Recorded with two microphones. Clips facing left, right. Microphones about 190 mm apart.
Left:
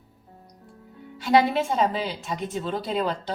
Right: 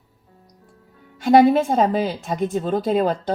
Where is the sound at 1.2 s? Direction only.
50° right (ahead or behind).